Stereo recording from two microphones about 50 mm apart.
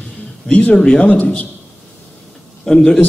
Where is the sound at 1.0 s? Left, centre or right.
Left.